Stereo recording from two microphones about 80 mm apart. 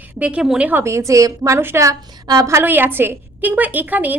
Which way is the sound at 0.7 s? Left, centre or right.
Right.